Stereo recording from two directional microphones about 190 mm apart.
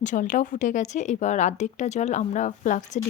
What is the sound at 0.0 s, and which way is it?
A woman's voice, 40° left (ahead or behind).